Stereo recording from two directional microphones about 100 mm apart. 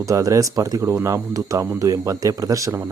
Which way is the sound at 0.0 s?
35° right (ahead or behind).